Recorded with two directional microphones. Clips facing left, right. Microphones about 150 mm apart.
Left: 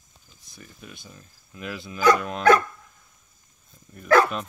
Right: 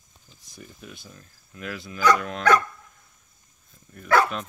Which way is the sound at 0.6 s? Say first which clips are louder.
Right 1 dB; centre (ahead or behind).